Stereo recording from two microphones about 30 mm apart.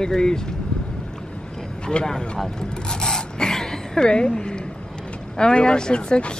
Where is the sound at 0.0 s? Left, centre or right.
Left.